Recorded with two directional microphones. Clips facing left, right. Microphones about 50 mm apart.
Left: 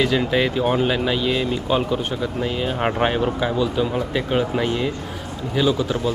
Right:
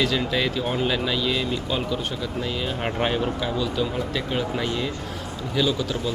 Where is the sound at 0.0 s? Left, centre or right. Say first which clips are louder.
Left 4 dB; centre.